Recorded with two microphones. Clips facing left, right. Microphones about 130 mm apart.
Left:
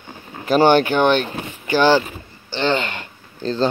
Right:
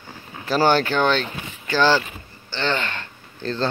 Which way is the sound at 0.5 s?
20° left (ahead or behind).